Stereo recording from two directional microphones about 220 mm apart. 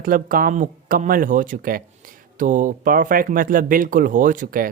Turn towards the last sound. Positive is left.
turn(degrees=-40)  # may be behind; listen again after turning